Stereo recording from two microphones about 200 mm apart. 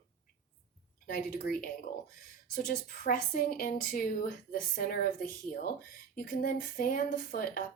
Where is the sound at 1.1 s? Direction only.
45° left (ahead or behind).